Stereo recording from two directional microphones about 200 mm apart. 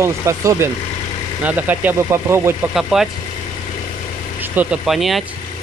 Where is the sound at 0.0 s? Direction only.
15° right (ahead or behind).